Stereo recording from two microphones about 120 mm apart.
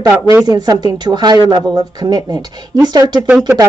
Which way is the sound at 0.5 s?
35° right (ahead or behind).